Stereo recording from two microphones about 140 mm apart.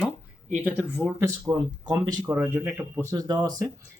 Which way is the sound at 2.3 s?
15° right (ahead or behind).